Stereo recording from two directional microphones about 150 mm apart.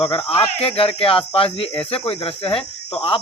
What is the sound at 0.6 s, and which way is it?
Speech, 40° left (ahead or behind).